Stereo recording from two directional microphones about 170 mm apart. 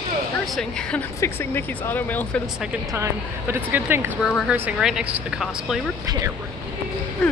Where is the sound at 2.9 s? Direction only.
15° right (ahead or behind).